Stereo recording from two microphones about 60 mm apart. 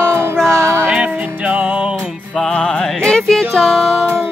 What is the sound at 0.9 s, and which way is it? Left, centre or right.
Music, centre.